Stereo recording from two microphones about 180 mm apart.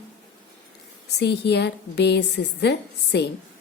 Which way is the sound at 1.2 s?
70° left (ahead or behind).